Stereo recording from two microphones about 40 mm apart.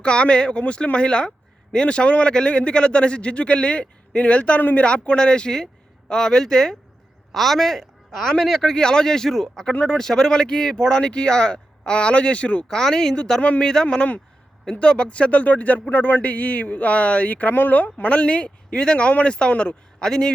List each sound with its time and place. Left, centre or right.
0.0 s speech: left
12.6 s speech: centre; by 17.5 s left
17.5 s speech: left
18.1 s speech: left